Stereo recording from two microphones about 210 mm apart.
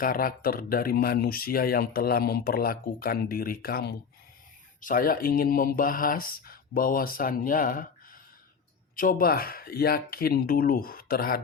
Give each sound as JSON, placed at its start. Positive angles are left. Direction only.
{"t": 0.0, "sound": "speech", "side_deg": 45}